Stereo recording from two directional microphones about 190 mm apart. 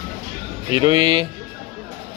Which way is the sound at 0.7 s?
25° right (ahead or behind).